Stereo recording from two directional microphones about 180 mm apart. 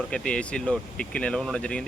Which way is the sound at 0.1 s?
5° left (ahead or behind).